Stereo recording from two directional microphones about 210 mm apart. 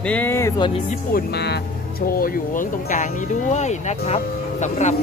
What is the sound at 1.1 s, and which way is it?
Speech, 50° left (ahead or behind).